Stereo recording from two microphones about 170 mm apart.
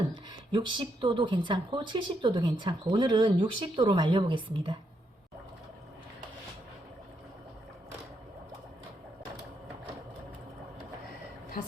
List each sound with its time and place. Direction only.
0.1 s speech: 25° right (ahead or behind)